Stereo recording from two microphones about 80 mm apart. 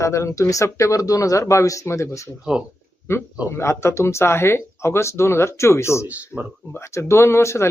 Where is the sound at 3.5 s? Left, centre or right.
Left.